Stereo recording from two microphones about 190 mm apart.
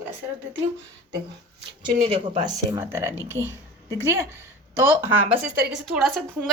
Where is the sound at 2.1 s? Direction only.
25° right (ahead or behind).